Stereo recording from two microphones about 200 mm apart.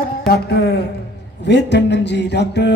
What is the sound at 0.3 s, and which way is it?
A woman's voice, 55° left (ahead or behind).